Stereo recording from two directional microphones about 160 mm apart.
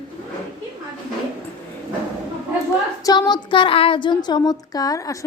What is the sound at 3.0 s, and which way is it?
Speech, 25° left (ahead or behind).